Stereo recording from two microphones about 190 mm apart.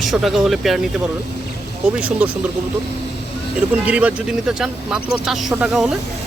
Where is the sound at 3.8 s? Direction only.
5° right (ahead or behind).